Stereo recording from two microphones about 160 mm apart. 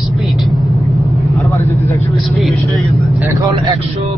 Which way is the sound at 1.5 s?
20° left (ahead or behind).